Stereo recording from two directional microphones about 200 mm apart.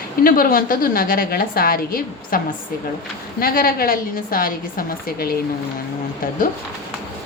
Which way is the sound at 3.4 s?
45° left (ahead or behind).